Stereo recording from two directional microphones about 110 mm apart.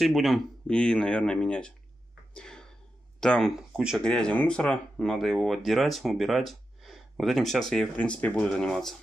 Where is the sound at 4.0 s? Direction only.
10° left (ahead or behind).